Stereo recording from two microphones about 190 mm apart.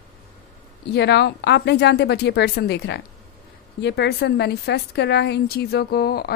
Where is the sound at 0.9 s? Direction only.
60° left (ahead or behind).